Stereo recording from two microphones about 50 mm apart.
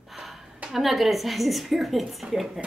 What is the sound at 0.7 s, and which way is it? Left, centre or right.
A woman's voice, centre.